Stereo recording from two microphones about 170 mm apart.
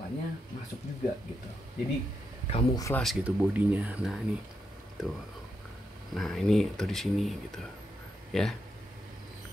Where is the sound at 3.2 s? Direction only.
10° right (ahead or behind).